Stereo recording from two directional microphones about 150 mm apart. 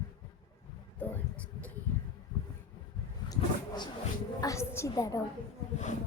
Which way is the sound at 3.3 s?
30° left (ahead or behind).